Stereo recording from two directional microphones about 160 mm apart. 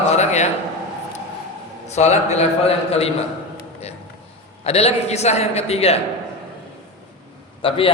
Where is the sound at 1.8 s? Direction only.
45° left (ahead or behind).